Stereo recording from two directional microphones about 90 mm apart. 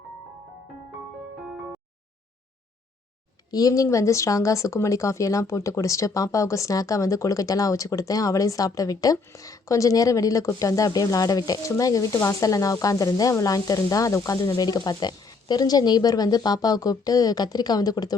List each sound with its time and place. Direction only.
1.5 s music: 10° right (ahead or behind)
3.5 s speech: 40° left (ahead or behind)